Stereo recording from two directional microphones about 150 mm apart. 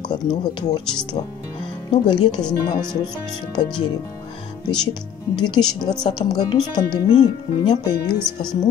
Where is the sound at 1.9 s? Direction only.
30° left (ahead or behind).